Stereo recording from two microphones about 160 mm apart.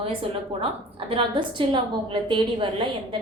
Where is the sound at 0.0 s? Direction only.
35° right (ahead or behind).